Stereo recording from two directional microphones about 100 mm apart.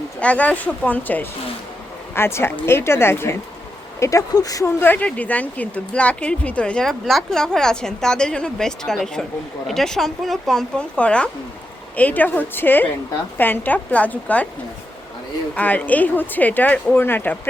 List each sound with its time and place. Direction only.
0.2 s a woman's voice: 15° left (ahead or behind)
4.0 s speech: 35° left (ahead or behind)
4.8 s a woman's voice: 15° left (ahead or behind)
15.5 s speech: 15° left (ahead or behind)